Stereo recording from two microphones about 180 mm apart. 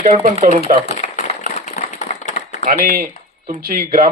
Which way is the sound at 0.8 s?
40° left (ahead or behind).